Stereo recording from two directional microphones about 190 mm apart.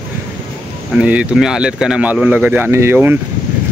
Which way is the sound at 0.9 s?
5° right (ahead or behind).